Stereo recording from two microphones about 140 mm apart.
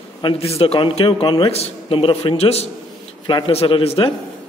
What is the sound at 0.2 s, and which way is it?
A man's voice, 40° left (ahead or behind).